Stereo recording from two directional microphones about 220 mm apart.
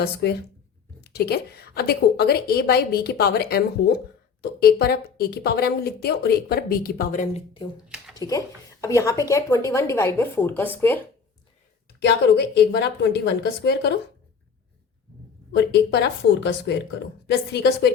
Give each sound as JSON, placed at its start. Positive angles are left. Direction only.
{"t": 0.0, "sound": "a woman's voice", "side_deg": 45}
{"t": 7.9, "sound": "speech", "side_deg": -5}
{"t": 8.2, "sound": "speech", "side_deg": 15}
{"t": 11.9, "sound": "a woman's voice", "side_deg": 50}
{"t": 15.5, "sound": "a woman's voice", "side_deg": 50}